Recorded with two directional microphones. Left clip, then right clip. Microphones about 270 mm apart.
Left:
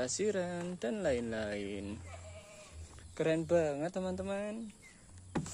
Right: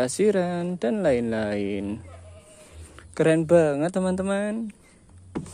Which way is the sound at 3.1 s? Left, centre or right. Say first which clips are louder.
Right 12 dB; right.